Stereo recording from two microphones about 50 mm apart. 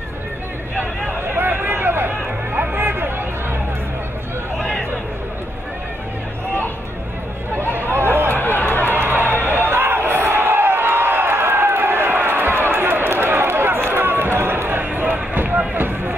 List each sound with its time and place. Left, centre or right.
1.3 s a sound: right
7.9 s a sound: right
8.3 s run: left
8.9 s run: right
9.7 s crowd: right
12.7 s run: right